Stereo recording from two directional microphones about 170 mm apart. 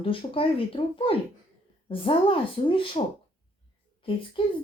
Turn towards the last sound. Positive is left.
turn(degrees=30)  # may be behind; listen again after turning